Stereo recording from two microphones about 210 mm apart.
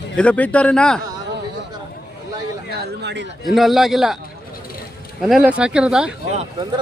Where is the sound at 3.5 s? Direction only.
Centre (ahead or behind).